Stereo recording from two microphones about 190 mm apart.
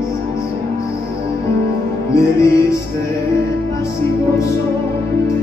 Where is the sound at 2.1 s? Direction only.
15° left (ahead or behind).